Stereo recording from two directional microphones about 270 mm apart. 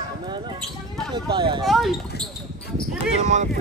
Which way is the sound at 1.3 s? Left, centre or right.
Centre.